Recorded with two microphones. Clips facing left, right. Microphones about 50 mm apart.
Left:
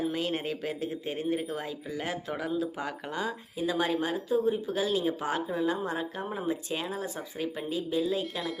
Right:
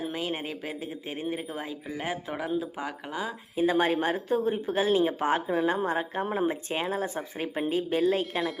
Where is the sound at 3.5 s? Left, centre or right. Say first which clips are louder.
Right 5 dB; right.